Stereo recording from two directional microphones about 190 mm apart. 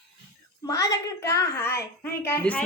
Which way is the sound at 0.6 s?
20° left (ahead or behind).